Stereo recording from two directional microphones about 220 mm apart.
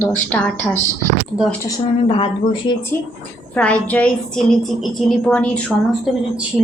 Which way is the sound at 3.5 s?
5° left (ahead or behind).